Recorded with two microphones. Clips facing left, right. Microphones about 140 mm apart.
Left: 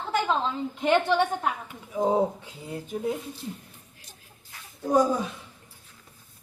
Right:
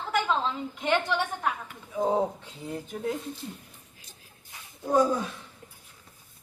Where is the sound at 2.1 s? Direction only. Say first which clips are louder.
Left 2 dB; 5° left (ahead or behind).